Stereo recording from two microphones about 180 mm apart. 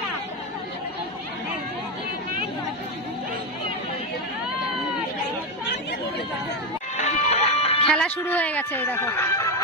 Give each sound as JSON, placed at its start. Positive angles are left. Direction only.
{"t": 5.7, "sound": "chatter", "side_deg": 70}
{"t": 7.0, "sound": "music", "side_deg": 40}
{"t": 7.9, "sound": "speech", "side_deg": 5}